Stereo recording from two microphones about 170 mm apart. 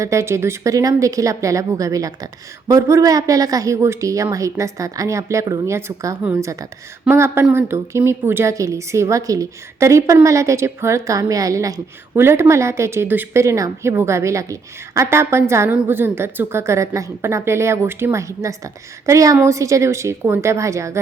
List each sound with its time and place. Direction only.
0.0 s a woman's voice: 15° right (ahead or behind)